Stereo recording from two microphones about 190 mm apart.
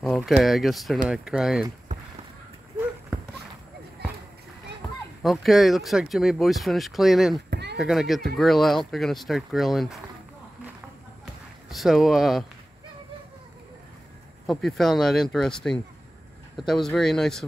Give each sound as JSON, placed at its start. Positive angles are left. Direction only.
{"t": 0.0, "sound": "speech", "side_deg": 0}
{"t": 5.2, "sound": "speech", "side_deg": 0}
{"t": 7.4, "sound": "a sound", "side_deg": -60}
{"t": 7.7, "sound": "speech", "side_deg": 0}
{"t": 11.7, "sound": "speech", "side_deg": 0}
{"t": 14.4, "sound": "speech", "side_deg": 0}